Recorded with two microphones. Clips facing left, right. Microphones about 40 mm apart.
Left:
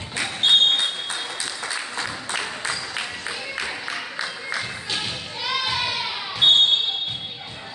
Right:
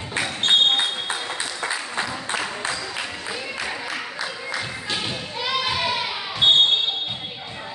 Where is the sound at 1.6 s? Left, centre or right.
Right.